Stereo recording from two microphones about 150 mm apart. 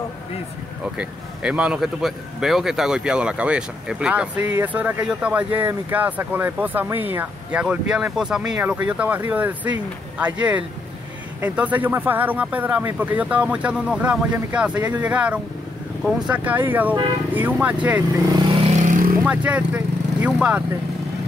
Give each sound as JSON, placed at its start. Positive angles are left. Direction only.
{"t": 0.9, "sound": "speech", "side_deg": -10}
{"t": 18.8, "sound": "vehicle", "side_deg": -60}
{"t": 19.2, "sound": "speech", "side_deg": -10}